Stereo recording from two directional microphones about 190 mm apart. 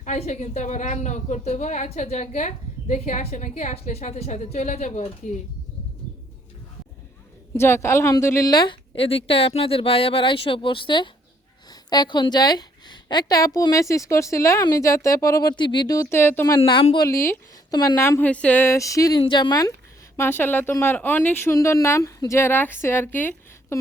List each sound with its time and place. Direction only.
0.0 s a woman's voice: 40° left (ahead or behind)
7.5 s a woman's voice: 15° left (ahead or behind)
16.6 s a woman's voice: 25° left (ahead or behind); by 23.8 s 10° left (ahead or behind)